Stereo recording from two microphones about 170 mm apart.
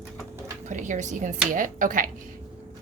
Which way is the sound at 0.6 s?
45° right (ahead or behind).